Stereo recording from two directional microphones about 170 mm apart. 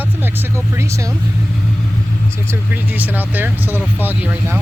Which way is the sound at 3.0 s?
10° right (ahead or behind).